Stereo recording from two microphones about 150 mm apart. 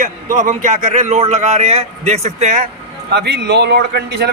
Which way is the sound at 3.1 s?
90° right.